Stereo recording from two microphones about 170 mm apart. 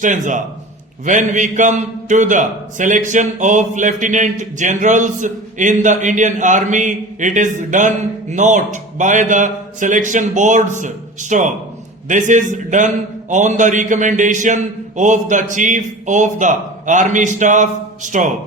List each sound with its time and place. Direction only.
0.0 s a man's voice: 45° right (ahead or behind)